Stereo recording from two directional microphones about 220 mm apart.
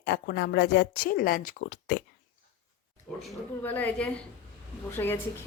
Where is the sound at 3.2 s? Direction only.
10° left (ahead or behind).